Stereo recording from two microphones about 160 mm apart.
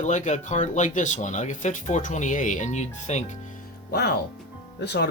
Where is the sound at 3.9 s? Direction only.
90° left.